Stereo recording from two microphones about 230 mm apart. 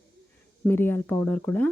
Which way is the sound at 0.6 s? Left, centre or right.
Centre.